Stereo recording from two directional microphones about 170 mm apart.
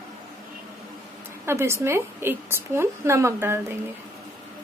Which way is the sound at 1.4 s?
15° right (ahead or behind).